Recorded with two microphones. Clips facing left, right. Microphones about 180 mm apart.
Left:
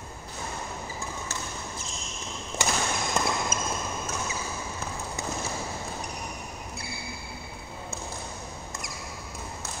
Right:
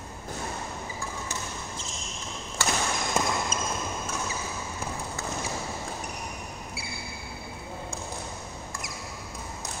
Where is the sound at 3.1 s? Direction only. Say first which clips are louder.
Right 1 dB; 10° right (ahead or behind).